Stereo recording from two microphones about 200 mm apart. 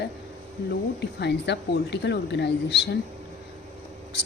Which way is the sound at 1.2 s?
60° left (ahead or behind).